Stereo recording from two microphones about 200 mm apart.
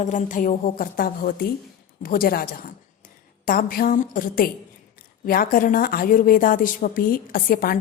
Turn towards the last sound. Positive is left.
turn(degrees=45)  # may be behind; listen again after turning